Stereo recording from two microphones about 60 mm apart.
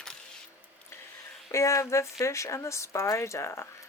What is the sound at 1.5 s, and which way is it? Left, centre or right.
Speech, left.